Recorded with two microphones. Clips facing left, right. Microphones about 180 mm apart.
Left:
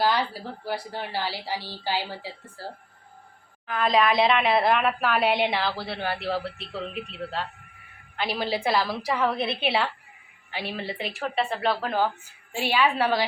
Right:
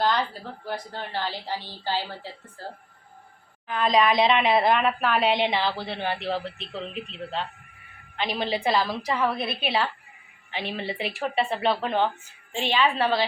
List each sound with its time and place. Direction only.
0.0 s a woman's voice: 10° left (ahead or behind)
3.7 s a woman's voice: 5° left (ahead or behind)
9.4 s a woman's voice: 25° left (ahead or behind)
10.5 s a woman's voice: 5° left (ahead or behind)